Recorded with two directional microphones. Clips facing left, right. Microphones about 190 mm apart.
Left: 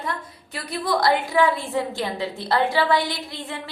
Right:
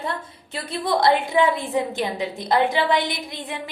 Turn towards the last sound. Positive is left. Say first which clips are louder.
# right 1 dB
turn(degrees=-15)  # may be behind; listen again after turning